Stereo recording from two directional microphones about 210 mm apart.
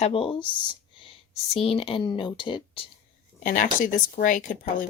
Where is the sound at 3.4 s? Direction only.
40° left (ahead or behind).